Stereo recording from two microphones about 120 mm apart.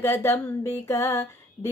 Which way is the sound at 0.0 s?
25° left (ahead or behind).